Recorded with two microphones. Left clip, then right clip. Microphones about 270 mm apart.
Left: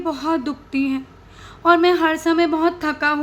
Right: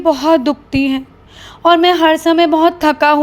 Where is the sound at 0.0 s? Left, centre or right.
Right.